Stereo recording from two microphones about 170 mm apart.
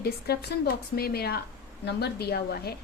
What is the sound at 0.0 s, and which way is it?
A woman's voice, 65° left (ahead or behind).